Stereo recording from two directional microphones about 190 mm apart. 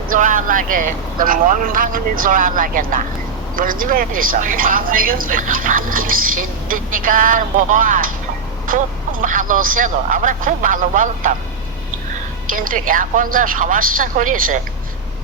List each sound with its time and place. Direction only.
0.1 s speech: 45° right (ahead or behind)
9.2 s speech: 45° right (ahead or behind)
12.5 s speech: 45° right (ahead or behind)